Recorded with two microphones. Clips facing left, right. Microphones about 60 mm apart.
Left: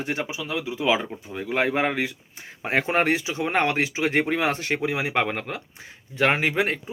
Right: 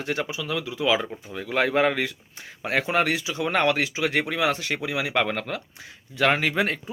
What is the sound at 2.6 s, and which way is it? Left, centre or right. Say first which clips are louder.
Speech: left 1 dB; left.